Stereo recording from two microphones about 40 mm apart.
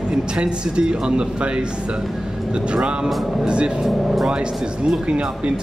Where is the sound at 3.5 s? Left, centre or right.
Right.